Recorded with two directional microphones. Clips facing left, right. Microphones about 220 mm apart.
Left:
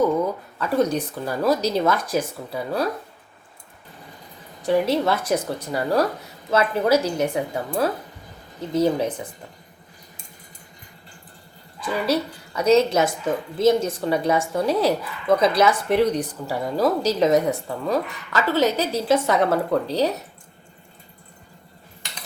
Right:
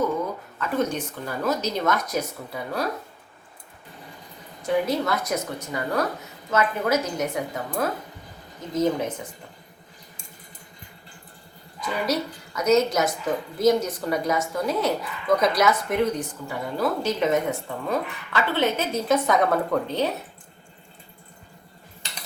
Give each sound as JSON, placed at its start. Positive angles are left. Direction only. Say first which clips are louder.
{"t": 0.6, "sound": "a woman's voice", "louder": "left 4 dB", "side_deg": 35}
{"t": 4.6, "sound": "a woman's voice", "louder": "left 4 dB", "side_deg": 30}
{"t": 12.1, "sound": "a woman's voice", "louder": "left 3 dB", "side_deg": 30}